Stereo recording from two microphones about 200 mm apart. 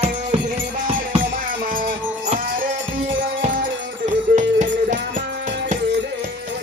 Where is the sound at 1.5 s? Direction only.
45° right (ahead or behind).